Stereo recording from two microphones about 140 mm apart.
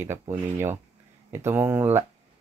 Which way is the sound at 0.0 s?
20° right (ahead or behind).